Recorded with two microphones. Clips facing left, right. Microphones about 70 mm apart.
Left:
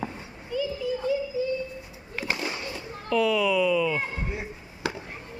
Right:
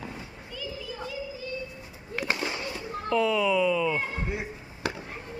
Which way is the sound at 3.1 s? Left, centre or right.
Right.